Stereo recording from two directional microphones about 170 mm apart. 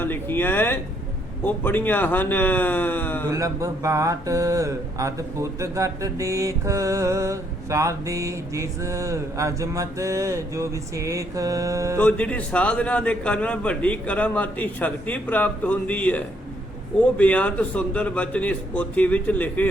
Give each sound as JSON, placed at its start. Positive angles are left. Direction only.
{"t": 0.0, "sound": "a sound", "side_deg": 10}
{"t": 1.5, "sound": "a man's voice", "side_deg": 10}
{"t": 3.2, "sound": "speech", "side_deg": -20}
{"t": 11.9, "sound": "a man's voice", "side_deg": 10}